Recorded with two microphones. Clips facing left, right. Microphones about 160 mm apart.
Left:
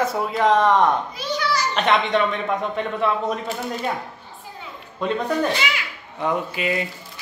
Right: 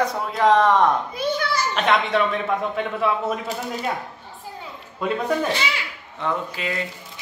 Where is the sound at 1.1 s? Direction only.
55° right (ahead or behind).